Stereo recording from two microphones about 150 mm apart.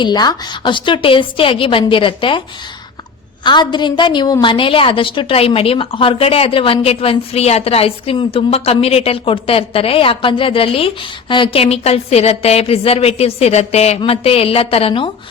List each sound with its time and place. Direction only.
0.0 s a woman's voice: 30° left (ahead or behind)
3.4 s a woman's voice: 30° left (ahead or behind)